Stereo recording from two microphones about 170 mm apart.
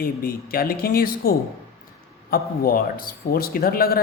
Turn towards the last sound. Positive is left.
turn(degrees=60)  # may be behind; listen again after turning